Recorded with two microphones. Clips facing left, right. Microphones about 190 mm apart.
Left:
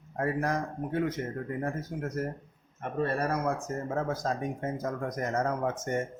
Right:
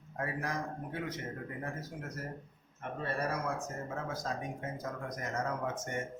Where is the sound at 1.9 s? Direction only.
50° left (ahead or behind).